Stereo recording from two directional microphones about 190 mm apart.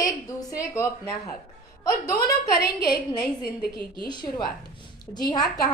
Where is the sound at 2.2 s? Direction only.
55° left (ahead or behind).